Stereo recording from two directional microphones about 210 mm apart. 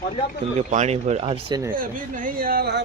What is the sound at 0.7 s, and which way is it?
Speech, 35° right (ahead or behind).